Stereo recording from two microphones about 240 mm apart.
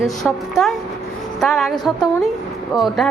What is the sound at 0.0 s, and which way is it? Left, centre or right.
A woman's voice, centre.